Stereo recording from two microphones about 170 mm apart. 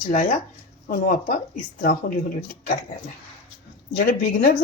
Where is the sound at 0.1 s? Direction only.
45° left (ahead or behind).